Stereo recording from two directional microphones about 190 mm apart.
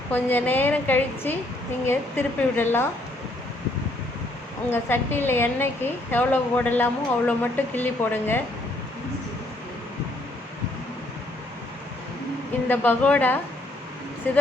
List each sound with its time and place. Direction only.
0.1 s a woman's voice: 10° left (ahead or behind)
4.7 s a woman's voice: 10° left (ahead or behind)
12.6 s a woman's voice: 10° left (ahead or behind)